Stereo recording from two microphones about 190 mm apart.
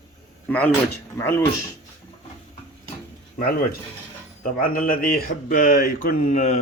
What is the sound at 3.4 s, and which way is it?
Speech, 50° left (ahead or behind).